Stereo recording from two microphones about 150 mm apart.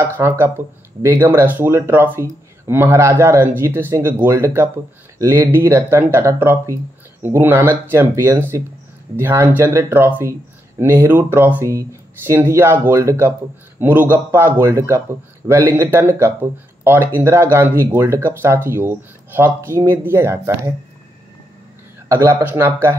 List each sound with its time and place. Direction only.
0.0 s speech: 15° right (ahead or behind)
22.1 s speech: 15° right (ahead or behind)